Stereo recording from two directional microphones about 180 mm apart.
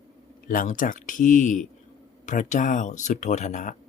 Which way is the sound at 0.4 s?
50° left (ahead or behind).